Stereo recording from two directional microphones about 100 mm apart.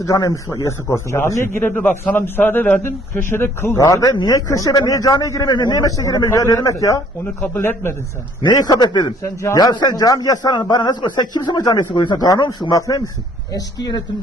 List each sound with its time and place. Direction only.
0.0 s a man's voice: 35° left (ahead or behind)
3.8 s a man's voice: 35° left (ahead or behind)
5.5 s a man's voice: 45° left (ahead or behind)
7.4 s a man's voice: 20° left (ahead or behind)
8.4 s a man's voice: 45° left (ahead or behind)
9.2 s a man's voice: 30° left (ahead or behind); by 14.0 s 45° left (ahead or behind)